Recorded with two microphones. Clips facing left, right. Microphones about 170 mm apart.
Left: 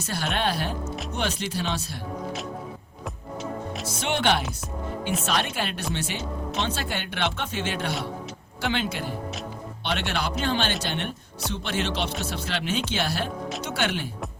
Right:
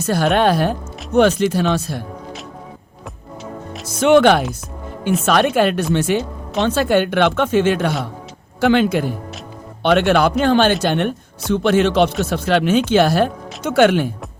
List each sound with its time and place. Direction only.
0.0 s speech: 50° right (ahead or behind)
4.0 s speech: 50° right (ahead or behind)